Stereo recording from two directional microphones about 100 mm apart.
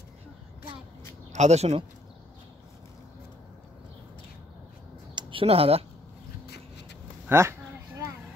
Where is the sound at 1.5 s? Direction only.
90° right.